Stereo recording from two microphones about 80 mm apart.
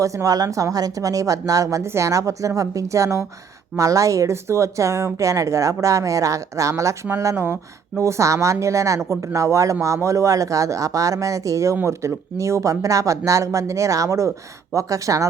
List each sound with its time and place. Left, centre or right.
0.0 s a woman's voice: right